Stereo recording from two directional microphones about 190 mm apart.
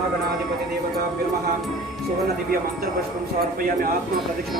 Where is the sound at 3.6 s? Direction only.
50° right (ahead or behind).